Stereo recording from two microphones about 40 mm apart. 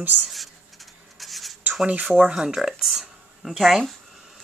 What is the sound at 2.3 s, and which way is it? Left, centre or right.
Speech, centre.